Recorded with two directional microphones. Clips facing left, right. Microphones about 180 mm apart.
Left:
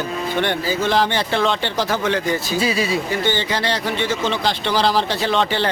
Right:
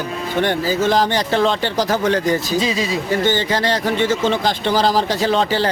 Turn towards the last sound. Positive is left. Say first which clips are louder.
# right 2 dB
turn(degrees=-40)  # may be behind; listen again after turning